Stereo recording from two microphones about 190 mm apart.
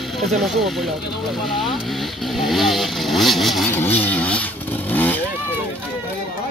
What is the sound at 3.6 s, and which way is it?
Speech, 10° left (ahead or behind).